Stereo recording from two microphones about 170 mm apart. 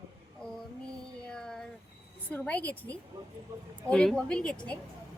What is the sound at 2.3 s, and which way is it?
A woman's voice, 5° left (ahead or behind).